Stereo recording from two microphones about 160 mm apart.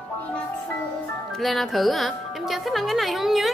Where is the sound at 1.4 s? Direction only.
Centre (ahead or behind).